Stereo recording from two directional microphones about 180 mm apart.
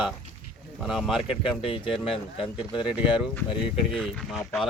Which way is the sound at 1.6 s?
30° left (ahead or behind).